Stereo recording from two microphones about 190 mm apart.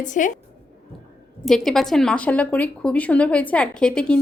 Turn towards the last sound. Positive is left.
turn(degrees=5)  # may be behind; listen again after turning